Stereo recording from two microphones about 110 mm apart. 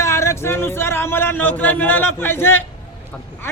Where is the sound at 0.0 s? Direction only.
25° left (ahead or behind).